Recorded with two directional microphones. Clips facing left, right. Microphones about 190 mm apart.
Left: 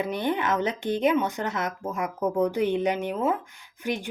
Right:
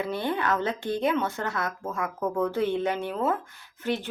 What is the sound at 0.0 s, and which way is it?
A woman's voice, 20° left (ahead or behind).